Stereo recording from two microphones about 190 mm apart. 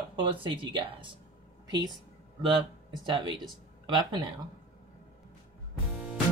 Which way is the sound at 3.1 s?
25° right (ahead or behind).